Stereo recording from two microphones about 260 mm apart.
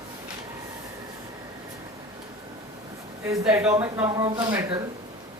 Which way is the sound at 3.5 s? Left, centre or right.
Centre.